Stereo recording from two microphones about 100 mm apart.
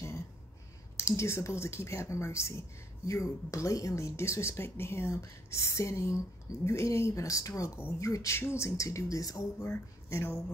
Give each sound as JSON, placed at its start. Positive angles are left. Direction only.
{"t": 0.9, "sound": "speech", "side_deg": 30}